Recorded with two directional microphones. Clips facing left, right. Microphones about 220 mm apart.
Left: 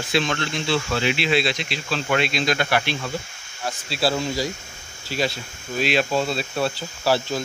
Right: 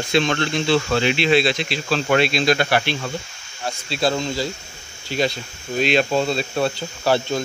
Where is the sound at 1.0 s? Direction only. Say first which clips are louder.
Right 3 dB; 5° left (ahead or behind).